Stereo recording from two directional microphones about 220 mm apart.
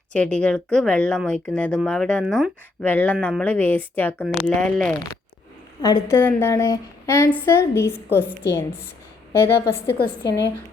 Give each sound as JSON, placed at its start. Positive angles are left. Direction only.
{"t": 0.1, "sound": "speech", "side_deg": 5}
{"t": 5.8, "sound": "a woman's voice", "side_deg": 15}